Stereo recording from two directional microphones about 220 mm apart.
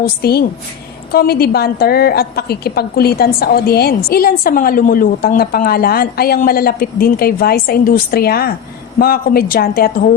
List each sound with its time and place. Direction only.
0.0 s a woman's voice: 45° left (ahead or behind)